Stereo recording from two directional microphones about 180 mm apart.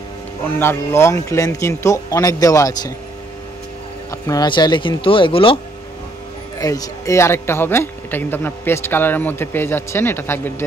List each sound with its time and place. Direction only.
0.6 s a man's voice: 15° left (ahead or behind)
4.1 s speech: 20° left (ahead or behind)
6.6 s a man's voice: 20° left (ahead or behind)